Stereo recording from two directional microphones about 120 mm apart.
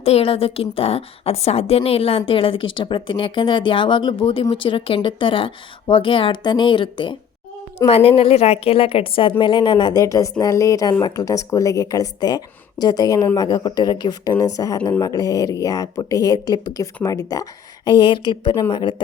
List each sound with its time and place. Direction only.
0.0 s a woman's voice: 55° left (ahead or behind)